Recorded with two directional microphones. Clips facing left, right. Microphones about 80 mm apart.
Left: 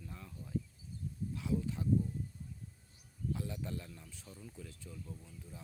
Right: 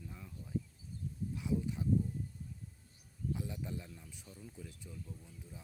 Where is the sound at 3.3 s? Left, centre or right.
Centre.